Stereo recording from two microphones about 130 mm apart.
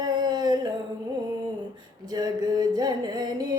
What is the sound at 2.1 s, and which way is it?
Music, 30° right (ahead or behind).